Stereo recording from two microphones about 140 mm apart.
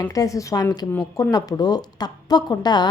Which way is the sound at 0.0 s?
25° left (ahead or behind).